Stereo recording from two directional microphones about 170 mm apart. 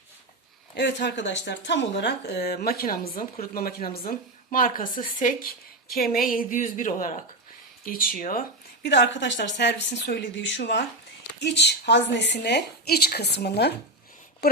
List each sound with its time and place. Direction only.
0.7 s a woman's voice: 90° left; by 7.3 s 45° left (ahead or behind)
7.9 s speech: 55° left (ahead or behind); by 13.7 s 75° left (ahead or behind)
14.4 s a sound: 65° left (ahead or behind)